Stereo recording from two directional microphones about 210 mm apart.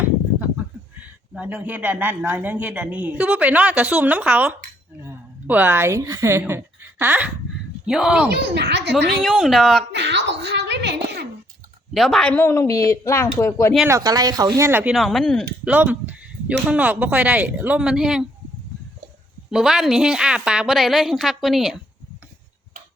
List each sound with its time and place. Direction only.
1.3 s a man's voice: 5° right (ahead or behind)
8.5 s speech: 55° right (ahead or behind)
9.2 s a woman's voice: centre (ahead or behind)
9.9 s a child's voice: 55° right (ahead or behind)
11.9 s speech: centre (ahead or behind)
13.8 s a man's voice: 15° right (ahead or behind)
19.5 s a woman's voice: centre (ahead or behind)